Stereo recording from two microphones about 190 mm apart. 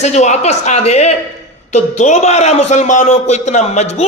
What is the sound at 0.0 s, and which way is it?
A man's voice, 35° left (ahead or behind).